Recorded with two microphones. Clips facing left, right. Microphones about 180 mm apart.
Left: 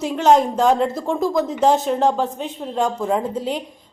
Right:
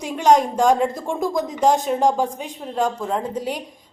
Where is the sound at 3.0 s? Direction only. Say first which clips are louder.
Left 4 dB; 5° left (ahead or behind).